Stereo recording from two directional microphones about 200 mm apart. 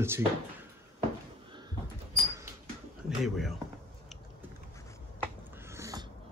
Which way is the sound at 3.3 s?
Centre (ahead or behind).